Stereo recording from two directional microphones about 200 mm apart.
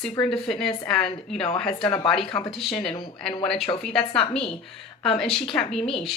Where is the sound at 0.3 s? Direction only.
5° left (ahead or behind).